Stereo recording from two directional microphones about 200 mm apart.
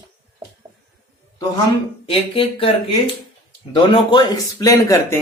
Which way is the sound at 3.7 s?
20° left (ahead or behind).